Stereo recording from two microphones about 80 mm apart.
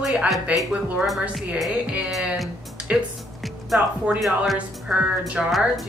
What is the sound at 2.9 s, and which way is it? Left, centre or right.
Speech, centre.